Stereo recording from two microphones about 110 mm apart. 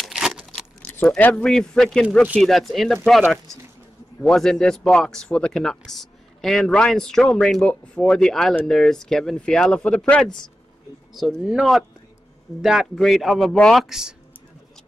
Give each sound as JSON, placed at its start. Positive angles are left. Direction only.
{"t": 0.0, "sound": "a sound", "side_deg": 0}
{"t": 1.0, "sound": "speech", "side_deg": 10}
{"t": 4.2, "sound": "speech", "side_deg": 5}
{"t": 11.1, "sound": "speech", "side_deg": -5}